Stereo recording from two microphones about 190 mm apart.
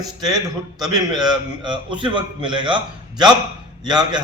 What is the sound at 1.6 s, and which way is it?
A man's voice, 25° right (ahead or behind).